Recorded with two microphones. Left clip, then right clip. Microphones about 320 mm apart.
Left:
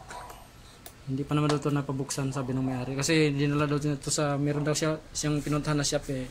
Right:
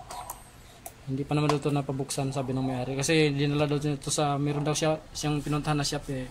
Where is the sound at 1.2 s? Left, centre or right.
Centre.